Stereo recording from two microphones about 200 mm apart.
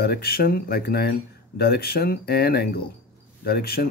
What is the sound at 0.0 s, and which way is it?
Speech, 50° left (ahead or behind).